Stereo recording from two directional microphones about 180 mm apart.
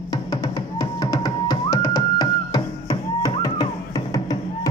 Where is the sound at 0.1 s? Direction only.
20° left (ahead or behind).